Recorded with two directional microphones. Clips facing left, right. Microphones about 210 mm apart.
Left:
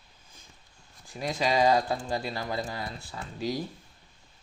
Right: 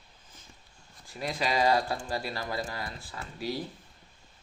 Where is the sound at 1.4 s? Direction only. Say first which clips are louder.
Left 3 dB; 20° left (ahead or behind).